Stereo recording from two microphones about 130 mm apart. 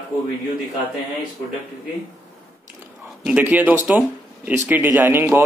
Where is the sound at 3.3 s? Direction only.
10° right (ahead or behind).